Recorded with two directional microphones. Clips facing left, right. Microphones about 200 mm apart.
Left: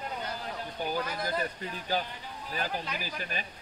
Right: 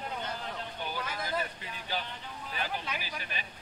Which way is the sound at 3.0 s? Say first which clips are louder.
Left 4 dB; 45° left (ahead or behind).